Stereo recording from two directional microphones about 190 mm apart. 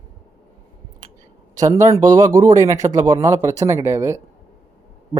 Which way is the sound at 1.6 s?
15° right (ahead or behind).